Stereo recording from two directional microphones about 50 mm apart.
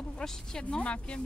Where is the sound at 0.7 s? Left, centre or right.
Left.